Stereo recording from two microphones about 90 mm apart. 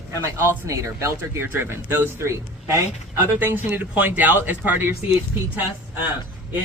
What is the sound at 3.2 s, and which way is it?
Speech, 20° right (ahead or behind).